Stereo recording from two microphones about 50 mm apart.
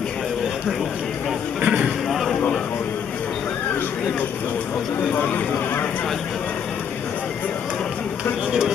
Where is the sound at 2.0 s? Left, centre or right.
Centre.